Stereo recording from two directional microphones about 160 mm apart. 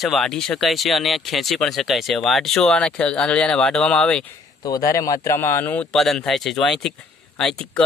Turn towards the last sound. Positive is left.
turn(degrees=5)  # may be behind; listen again after turning